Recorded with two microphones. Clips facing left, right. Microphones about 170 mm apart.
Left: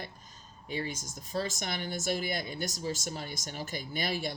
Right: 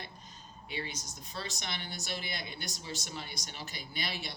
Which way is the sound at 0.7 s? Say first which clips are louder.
Left 5 dB; 45° left (ahead or behind).